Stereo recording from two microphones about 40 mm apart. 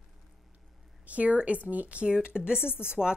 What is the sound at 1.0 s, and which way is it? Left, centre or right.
A woman's voice, right.